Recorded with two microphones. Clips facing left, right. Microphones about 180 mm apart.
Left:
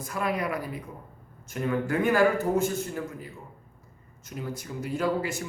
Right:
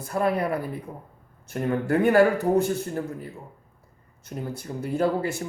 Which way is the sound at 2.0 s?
65° right (ahead or behind).